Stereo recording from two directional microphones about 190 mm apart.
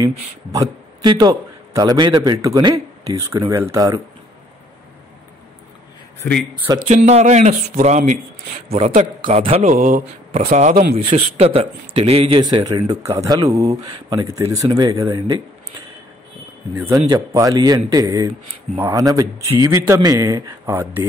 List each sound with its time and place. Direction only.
0.0 s a man's voice: 15° right (ahead or behind)
6.9 s a man's voice: 35° right (ahead or behind)
16.7 s a man's voice: 10° right (ahead or behind)